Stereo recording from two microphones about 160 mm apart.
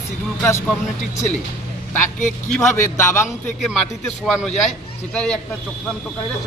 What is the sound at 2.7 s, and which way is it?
Speech, 20° left (ahead or behind).